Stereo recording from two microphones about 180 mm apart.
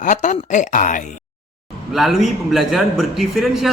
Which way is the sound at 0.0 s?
45° left (ahead or behind).